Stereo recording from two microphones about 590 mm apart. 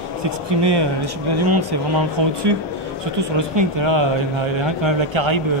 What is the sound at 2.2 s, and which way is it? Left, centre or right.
Speech, right.